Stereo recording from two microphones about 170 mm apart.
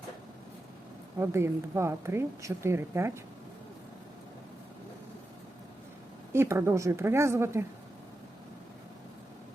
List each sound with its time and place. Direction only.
1.2 s a woman's voice: 15° right (ahead or behind)
6.3 s a woman's voice: 15° right (ahead or behind)